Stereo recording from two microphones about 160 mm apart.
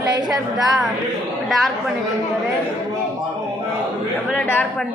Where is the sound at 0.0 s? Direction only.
25° right (ahead or behind).